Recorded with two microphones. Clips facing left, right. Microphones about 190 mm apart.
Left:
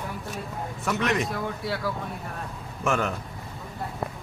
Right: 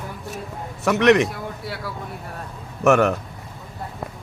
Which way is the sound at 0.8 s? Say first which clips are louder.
Right 10 dB; 75° right (ahead or behind).